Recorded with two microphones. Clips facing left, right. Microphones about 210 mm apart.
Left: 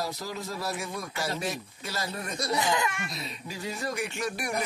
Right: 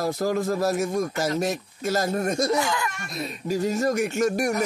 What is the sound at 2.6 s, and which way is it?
Speech, 20° left (ahead or behind).